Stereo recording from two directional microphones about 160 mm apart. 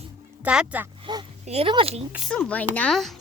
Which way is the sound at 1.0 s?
30° right (ahead or behind).